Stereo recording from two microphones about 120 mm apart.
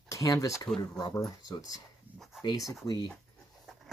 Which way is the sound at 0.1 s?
30° left (ahead or behind).